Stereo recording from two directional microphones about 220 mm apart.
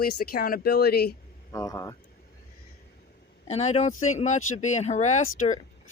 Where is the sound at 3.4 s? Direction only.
30° left (ahead or behind).